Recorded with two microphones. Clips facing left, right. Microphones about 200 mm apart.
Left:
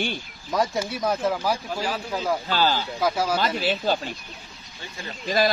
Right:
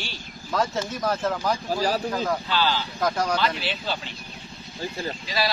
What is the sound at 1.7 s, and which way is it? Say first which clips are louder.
Speech: right 4 dB; 40° right (ahead or behind).